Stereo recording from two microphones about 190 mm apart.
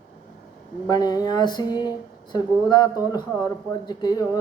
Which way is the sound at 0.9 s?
20° left (ahead or behind).